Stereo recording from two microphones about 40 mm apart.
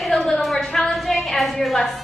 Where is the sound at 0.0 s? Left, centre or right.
Centre.